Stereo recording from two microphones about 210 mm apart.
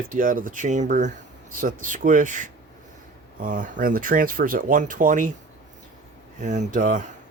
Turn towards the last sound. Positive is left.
turn(degrees=-40)  # may be behind; listen again after turning